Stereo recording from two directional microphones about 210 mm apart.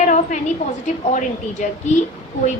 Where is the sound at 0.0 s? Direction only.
35° left (ahead or behind).